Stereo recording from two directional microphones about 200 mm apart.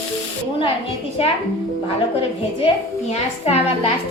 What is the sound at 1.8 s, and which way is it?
Speech, 30° left (ahead or behind).